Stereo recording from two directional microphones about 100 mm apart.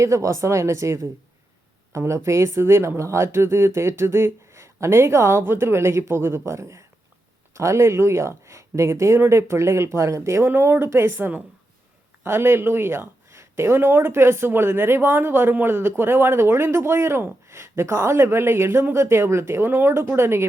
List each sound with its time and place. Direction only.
0.0 s speech: 30° right (ahead or behind)